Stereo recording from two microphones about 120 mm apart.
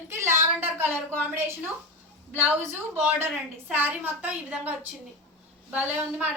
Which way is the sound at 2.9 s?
10° right (ahead or behind).